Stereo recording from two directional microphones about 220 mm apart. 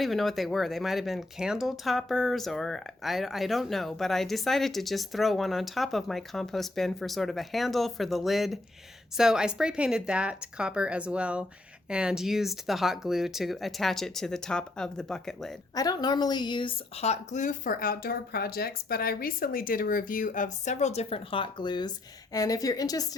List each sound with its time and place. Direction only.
0.0 s speech: centre (ahead or behind)
15.7 s a woman's voice: 15° left (ahead or behind)